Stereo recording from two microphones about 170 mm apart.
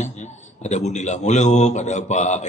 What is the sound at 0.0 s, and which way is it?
Speech, 45° left (ahead or behind).